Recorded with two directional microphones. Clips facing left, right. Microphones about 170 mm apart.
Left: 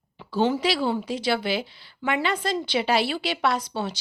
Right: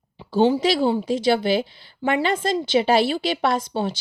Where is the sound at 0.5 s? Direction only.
45° right (ahead or behind).